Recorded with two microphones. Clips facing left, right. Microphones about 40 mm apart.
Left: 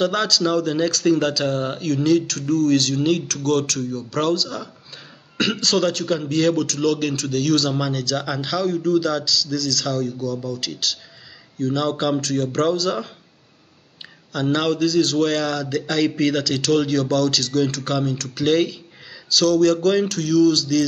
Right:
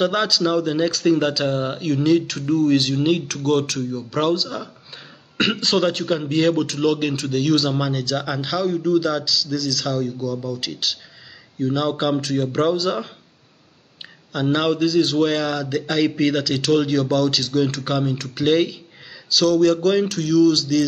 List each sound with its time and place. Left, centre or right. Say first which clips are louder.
0.0 s speech: even; centre
14.3 s speech: right 1 dB; centre